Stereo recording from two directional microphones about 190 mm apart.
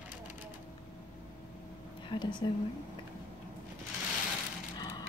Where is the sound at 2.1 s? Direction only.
30° left (ahead or behind).